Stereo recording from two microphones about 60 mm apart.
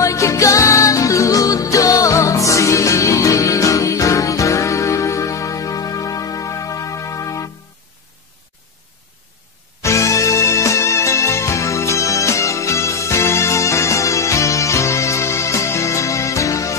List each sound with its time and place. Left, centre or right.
0.0 s music: left
9.8 s music: left